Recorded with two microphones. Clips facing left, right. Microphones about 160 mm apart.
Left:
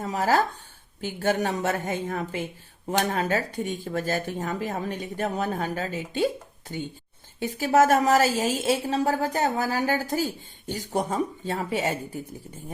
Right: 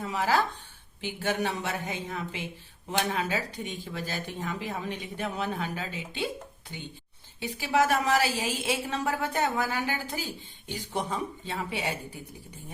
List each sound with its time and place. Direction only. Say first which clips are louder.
0.0 s a woman's voice: left 4 dB; 45° left (ahead or behind)